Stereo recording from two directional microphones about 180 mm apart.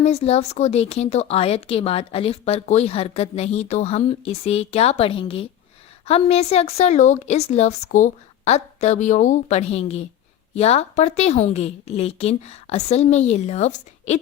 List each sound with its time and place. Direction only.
0.0 s speech: 35° left (ahead or behind)